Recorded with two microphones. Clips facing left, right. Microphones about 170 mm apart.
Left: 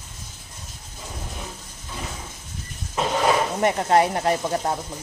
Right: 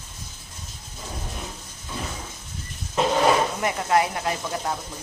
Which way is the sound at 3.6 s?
40° left (ahead or behind).